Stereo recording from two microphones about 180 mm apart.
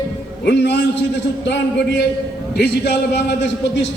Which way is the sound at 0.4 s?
70° left (ahead or behind).